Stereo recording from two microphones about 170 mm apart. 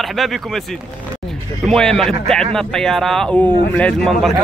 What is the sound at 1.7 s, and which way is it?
Speech, 5° left (ahead or behind).